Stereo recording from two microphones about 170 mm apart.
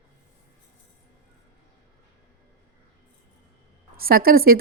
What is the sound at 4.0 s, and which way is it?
Speech, 60° right (ahead or behind).